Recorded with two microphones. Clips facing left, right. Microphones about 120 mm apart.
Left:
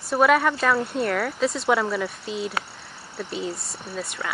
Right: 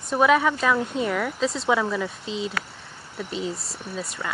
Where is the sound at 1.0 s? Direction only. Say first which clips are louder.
Left 1 dB; 10° right (ahead or behind).